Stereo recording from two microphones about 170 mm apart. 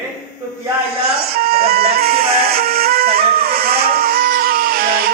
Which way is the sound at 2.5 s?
65° right (ahead or behind).